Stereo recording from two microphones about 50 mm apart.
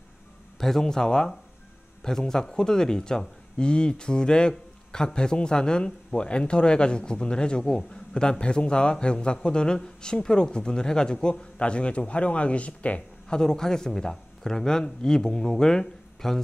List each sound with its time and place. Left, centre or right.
0.6 s speech: centre; by 13.4 s left
13.4 s speech: centre